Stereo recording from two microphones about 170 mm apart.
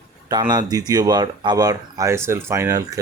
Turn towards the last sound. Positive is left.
turn(degrees=-20)  # may be behind; listen again after turning